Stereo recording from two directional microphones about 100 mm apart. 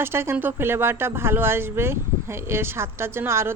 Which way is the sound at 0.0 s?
25° right (ahead or behind).